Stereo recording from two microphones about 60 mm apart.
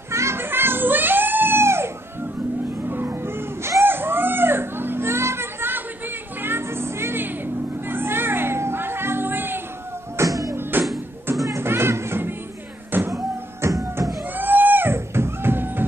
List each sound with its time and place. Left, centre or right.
0.1 s music: right
3.8 s children playing: right
6.4 s music: right
10.1 s music: right
10.5 s music: right
13.6 s music: right
14.3 s a sound: right